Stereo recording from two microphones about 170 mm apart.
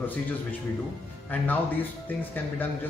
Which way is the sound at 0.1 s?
10° left (ahead or behind).